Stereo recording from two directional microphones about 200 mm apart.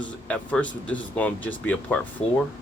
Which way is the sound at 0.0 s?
5° left (ahead or behind).